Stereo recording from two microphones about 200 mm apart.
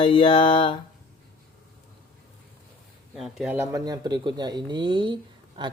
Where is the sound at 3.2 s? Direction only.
5° right (ahead or behind); by 5.7 s 25° right (ahead or behind).